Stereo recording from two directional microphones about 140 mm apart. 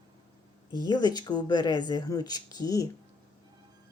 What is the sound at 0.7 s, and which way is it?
Speech, 30° left (ahead or behind).